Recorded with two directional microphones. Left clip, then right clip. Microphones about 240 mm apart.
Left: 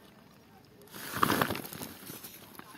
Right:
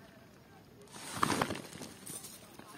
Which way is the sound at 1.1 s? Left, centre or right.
Left.